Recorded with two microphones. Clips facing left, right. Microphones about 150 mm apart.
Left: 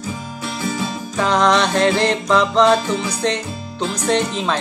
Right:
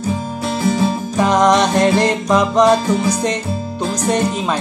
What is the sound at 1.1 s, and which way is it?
Music, 15° right (ahead or behind).